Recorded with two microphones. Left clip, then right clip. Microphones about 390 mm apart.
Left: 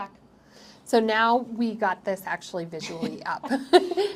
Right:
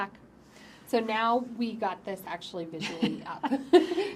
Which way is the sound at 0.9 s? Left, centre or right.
Left.